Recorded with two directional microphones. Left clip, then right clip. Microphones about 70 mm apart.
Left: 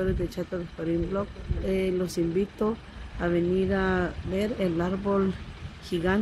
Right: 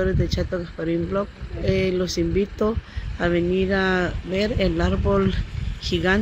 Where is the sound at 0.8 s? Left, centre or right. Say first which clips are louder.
Right 4 dB; right.